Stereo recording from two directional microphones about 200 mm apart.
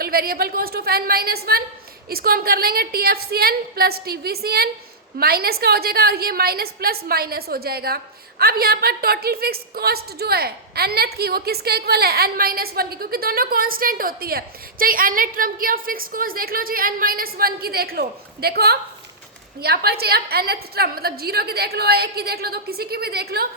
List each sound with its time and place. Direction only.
0.0 s a woman's voice: 50° right (ahead or behind)